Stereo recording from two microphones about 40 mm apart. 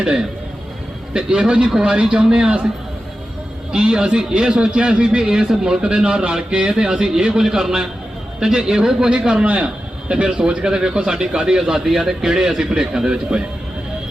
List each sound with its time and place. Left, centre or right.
1.1 s a man's voice: right
3.7 s a man's voice: right